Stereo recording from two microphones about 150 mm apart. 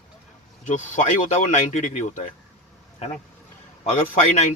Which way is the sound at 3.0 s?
45° left (ahead or behind).